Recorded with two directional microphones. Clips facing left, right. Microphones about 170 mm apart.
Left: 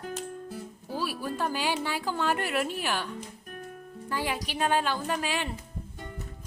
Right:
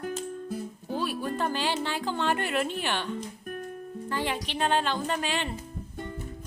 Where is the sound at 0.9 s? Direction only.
5° left (ahead or behind).